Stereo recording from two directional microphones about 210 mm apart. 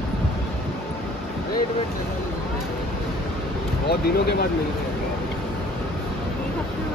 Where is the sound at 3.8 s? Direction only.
50° left (ahead or behind).